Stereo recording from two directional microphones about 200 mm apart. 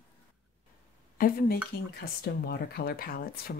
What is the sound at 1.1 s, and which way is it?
Speech, 45° left (ahead or behind).